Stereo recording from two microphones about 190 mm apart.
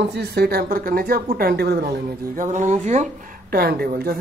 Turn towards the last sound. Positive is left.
turn(degrees=-55)  # may be behind; listen again after turning